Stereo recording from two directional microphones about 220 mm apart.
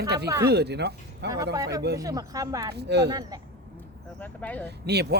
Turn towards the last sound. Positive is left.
turn(degrees=-50)  # may be behind; listen again after turning